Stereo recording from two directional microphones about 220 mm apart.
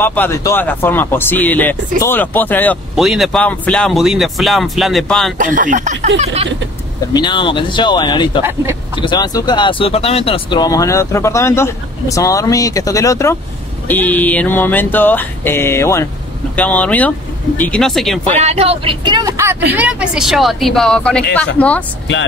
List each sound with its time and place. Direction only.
0.0 s speech: 10° left (ahead or behind)
5.4 s speech: 35° right (ahead or behind)
7.2 s speech: 20° left (ahead or behind)
8.4 s speech: 10° right (ahead or behind)
9.0 s a woman's voice: 20° left (ahead or behind); by 18.2 s centre (ahead or behind)
18.4 s a woman's voice: 30° right (ahead or behind); by 21.8 s 5° left (ahead or behind)